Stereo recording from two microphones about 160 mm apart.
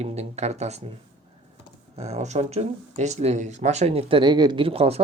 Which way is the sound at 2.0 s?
45° right (ahead or behind).